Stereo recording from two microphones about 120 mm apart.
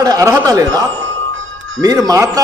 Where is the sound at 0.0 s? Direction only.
30° right (ahead or behind).